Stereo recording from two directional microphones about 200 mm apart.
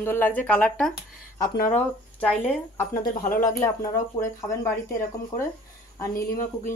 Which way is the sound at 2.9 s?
45° left (ahead or behind).